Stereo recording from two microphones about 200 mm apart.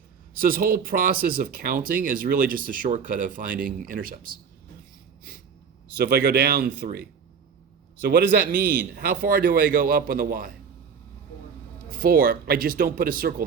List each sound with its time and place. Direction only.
0.3 s speech: 45° right (ahead or behind)
6.0 s speech: 50° right (ahead or behind)
12.0 s speech: 45° right (ahead or behind)